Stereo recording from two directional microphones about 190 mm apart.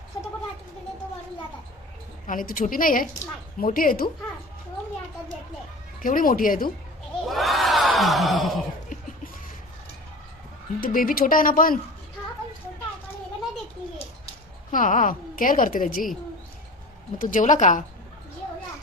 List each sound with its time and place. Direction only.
2.2 s a woman's voice: 45° left (ahead or behind)
6.0 s a woman's voice: 45° left (ahead or behind)
7.3 s crowd: centre (ahead or behind)
10.8 s a woman's voice: 45° left (ahead or behind)
14.7 s a woman's voice: 45° left (ahead or behind)
17.2 s a woman's voice: 45° left (ahead or behind)